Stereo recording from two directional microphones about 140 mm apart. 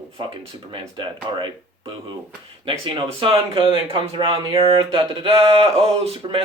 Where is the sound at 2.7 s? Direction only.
40° right (ahead or behind).